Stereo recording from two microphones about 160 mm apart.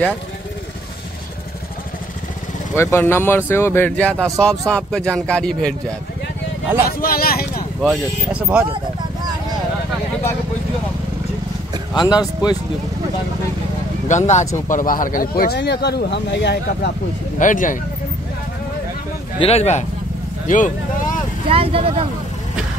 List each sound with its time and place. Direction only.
2.7 s speech: 15° left (ahead or behind)
6.9 s speech: 70° left (ahead or behind)
7.8 s speech: 5° right (ahead or behind)
11.9 s speech: 25° left (ahead or behind)
14.0 s speech: 50° left (ahead or behind); by 16.9 s 90° left
17.4 s speech: 55° left (ahead or behind)
19.4 s speech: 40° left (ahead or behind)
20.4 s vehicle: 55° left (ahead or behind)
21.5 s speech: 35° right (ahead or behind)